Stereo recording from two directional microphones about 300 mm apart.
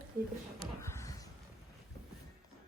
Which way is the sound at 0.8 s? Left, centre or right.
Centre.